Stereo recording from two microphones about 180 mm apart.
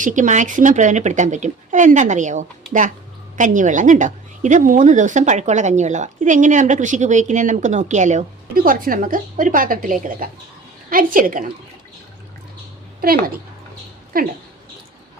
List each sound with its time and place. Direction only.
0.0 s a woman's voice: 45° right (ahead or behind)
13.0 s a woman's voice: 55° right (ahead or behind)